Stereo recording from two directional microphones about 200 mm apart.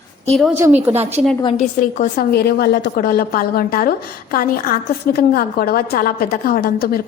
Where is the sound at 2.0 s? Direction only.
45° left (ahead or behind).